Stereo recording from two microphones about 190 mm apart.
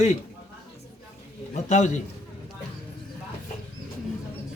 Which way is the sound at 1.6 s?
40° left (ahead or behind).